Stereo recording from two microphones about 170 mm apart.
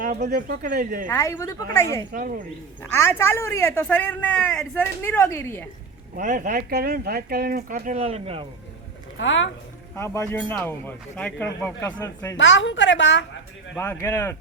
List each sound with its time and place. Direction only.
0.0 s speech: 50° right (ahead or behind)
1.0 s speech: 15° left (ahead or behind)
2.1 s speech: 50° right (ahead or behind)
2.9 s speech: 15° left (ahead or behind)
6.1 s speech: 50° right (ahead or behind); by 8.4 s 35° right (ahead or behind)
9.1 s a woman's voice: 90° left
9.9 s speech: 15° left (ahead or behind)
12.4 s a woman's voice: 90° left
13.7 s speech: 15° left (ahead or behind)